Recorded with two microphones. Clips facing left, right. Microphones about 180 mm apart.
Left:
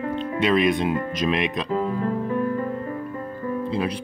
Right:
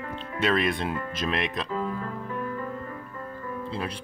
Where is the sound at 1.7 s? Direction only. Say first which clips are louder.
Left 7 dB; 25° left (ahead or behind).